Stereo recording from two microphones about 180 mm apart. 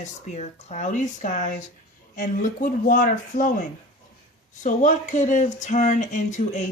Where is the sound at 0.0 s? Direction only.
40° left (ahead or behind).